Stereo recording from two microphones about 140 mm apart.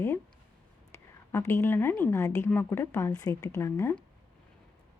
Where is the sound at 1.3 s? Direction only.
15° left (ahead or behind).